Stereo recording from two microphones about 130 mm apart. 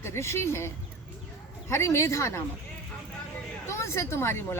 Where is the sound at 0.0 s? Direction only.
20° left (ahead or behind).